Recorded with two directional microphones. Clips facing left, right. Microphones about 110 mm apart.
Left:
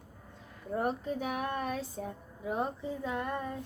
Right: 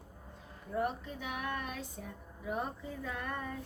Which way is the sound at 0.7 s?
40° left (ahead or behind).